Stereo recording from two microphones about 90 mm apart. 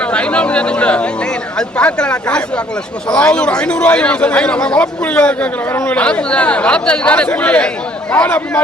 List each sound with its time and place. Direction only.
0.0 s a man's voice: 15° left (ahead or behind)